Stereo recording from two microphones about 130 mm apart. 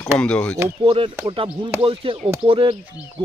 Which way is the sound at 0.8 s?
45° right (ahead or behind).